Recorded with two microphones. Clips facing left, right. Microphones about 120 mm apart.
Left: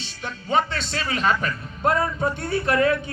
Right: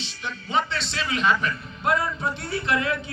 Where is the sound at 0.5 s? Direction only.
45° left (ahead or behind).